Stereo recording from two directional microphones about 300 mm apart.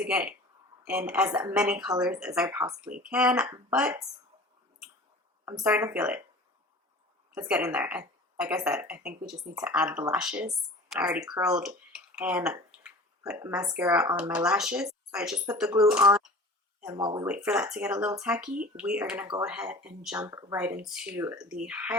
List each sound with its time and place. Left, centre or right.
0.0 s a woman's voice: centre
5.5 s a woman's voice: centre
7.3 s a woman's voice: centre
16.8 s a woman's voice: centre